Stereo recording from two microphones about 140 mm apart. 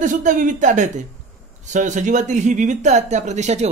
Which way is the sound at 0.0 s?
65° right (ahead or behind).